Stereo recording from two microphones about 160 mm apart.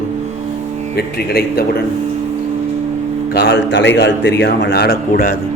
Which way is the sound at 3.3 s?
90° left.